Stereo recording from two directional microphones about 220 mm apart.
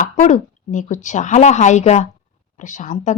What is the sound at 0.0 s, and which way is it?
A woman's voice, 35° left (ahead or behind).